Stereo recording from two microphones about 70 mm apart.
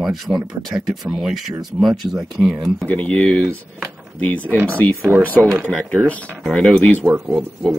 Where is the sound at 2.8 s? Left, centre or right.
Centre.